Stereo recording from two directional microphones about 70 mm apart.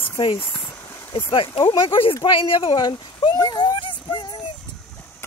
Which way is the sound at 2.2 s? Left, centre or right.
Left.